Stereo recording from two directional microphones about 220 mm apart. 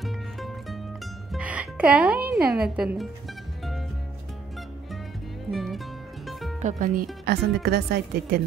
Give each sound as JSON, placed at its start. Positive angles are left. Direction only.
{"t": 0.0, "sound": "music", "side_deg": 0}
{"t": 2.3, "sound": "a woman's voice", "side_deg": 0}
{"t": 5.5, "sound": "music", "side_deg": 0}
{"t": 6.8, "sound": "speech", "side_deg": -40}